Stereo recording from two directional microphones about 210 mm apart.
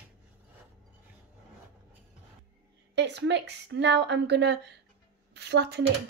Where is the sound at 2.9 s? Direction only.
55° right (ahead or behind).